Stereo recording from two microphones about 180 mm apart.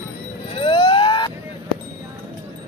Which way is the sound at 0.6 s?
25° left (ahead or behind).